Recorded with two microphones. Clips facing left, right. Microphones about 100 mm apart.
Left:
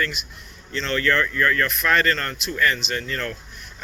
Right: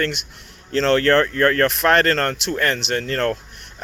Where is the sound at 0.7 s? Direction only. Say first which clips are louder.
Right 7 dB; 90° right.